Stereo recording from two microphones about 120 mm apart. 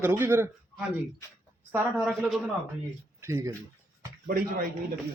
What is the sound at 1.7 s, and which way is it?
Speech, 15° right (ahead or behind).